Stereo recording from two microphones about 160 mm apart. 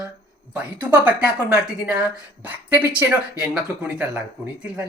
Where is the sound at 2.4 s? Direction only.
10° right (ahead or behind).